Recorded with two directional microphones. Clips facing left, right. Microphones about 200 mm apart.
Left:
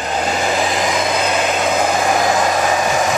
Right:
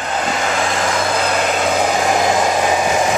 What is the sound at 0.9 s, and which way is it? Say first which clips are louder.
Vehicle: even; centre (ahead or behind).